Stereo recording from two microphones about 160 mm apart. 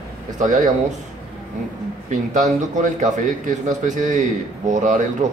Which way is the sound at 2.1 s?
50° right (ahead or behind).